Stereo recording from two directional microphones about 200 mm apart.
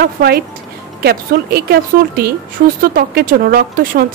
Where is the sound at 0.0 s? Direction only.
50° right (ahead or behind).